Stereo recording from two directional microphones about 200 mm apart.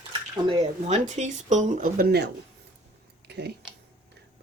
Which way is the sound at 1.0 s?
35° right (ahead or behind).